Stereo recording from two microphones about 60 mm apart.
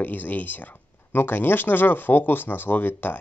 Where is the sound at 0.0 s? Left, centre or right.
Left.